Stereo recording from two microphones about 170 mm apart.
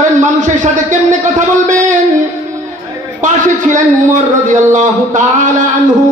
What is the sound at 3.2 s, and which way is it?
A man's voice, 50° right (ahead or behind).